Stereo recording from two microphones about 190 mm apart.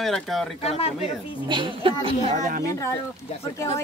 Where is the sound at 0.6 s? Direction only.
30° left (ahead or behind).